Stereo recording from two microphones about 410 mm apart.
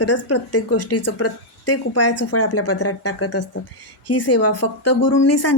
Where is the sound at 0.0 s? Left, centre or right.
Left.